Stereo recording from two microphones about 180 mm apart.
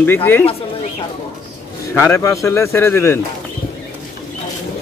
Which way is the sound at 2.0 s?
15° left (ahead or behind).